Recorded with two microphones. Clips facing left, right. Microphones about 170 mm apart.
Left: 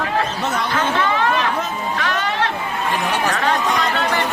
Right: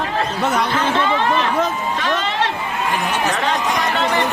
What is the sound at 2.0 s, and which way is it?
Music, 20° right (ahead or behind).